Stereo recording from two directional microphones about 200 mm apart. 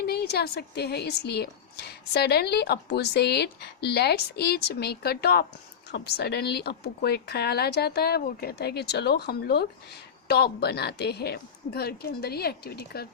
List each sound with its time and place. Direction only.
0.0 s a woman's voice: 55° left (ahead or behind)